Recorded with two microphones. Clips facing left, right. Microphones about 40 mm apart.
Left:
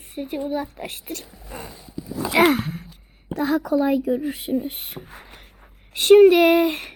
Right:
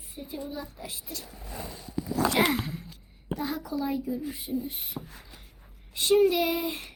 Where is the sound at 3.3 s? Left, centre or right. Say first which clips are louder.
Left 11 dB; left.